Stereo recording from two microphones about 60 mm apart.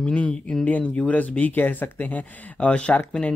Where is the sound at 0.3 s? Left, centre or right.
Centre.